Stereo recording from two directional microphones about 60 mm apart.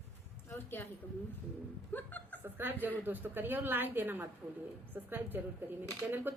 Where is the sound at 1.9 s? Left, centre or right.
Left.